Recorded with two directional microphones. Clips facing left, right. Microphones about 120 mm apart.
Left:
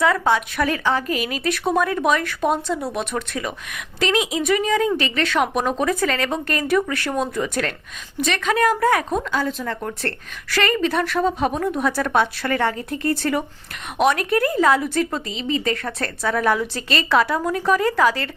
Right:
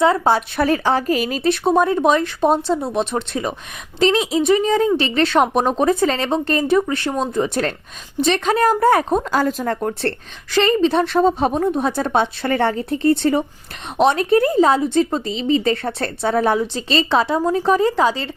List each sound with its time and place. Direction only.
0.0 s a woman's voice: 30° right (ahead or behind)
10.0 s speech: 25° right (ahead or behind)